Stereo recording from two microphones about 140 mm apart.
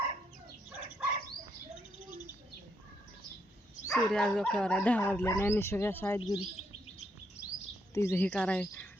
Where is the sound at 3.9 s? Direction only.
5° left (ahead or behind).